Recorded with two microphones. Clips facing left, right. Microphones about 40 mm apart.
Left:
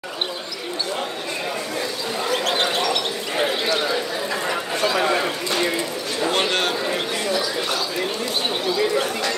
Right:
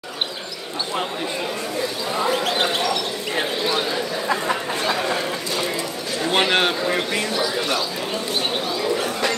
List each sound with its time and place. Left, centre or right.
6.3 s a man's voice: right